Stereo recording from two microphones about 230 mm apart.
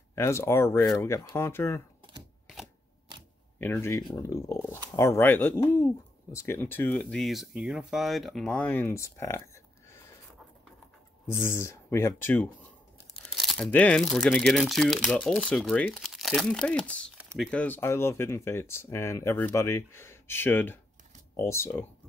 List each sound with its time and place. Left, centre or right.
0.1 s speech: centre
3.5 s speech: centre
11.2 s speech: centre